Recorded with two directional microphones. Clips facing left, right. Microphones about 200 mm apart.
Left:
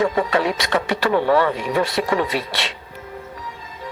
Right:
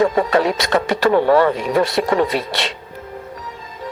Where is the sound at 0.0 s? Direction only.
45° right (ahead or behind).